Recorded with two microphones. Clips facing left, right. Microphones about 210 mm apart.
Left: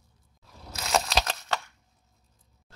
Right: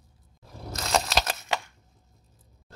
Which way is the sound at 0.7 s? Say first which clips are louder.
Even; centre (ahead or behind).